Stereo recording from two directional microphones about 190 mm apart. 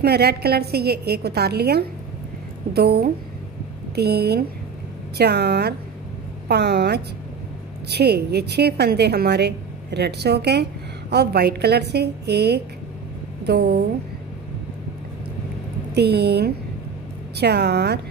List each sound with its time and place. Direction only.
0.0 s a woman's voice: 55° right (ahead or behind)
15.9 s a woman's voice: 60° right (ahead or behind)